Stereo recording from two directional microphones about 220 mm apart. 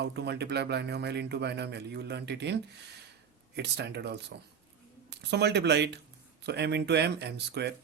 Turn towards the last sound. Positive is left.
turn(degrees=-50)  # may be behind; listen again after turning